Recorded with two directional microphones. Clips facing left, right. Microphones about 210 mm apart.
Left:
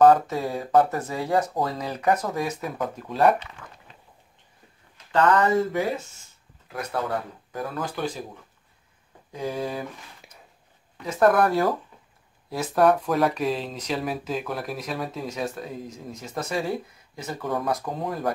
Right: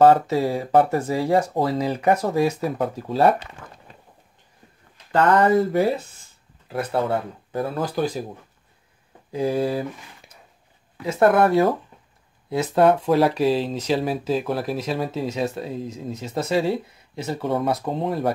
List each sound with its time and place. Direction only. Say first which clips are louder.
0.0 s speech: right 2 dB; 25° right (ahead or behind)
5.4 s speech: right 5 dB; 35° right (ahead or behind)
9.3 s speech: right 7 dB; 30° right (ahead or behind)
10.2 s a sound: even; centre (ahead or behind)
11.1 s speech: right 3 dB; 25° right (ahead or behind)